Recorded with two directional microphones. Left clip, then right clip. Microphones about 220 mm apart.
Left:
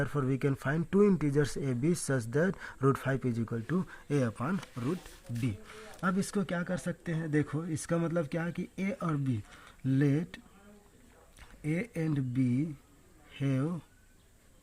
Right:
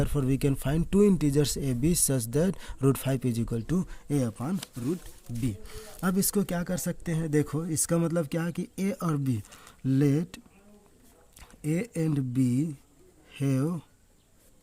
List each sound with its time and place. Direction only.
0.0 s speech: 30° right (ahead or behind)
5.4 s speech: 40° right (ahead or behind)